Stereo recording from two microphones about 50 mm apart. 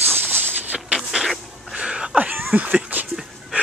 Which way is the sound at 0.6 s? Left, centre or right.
Right.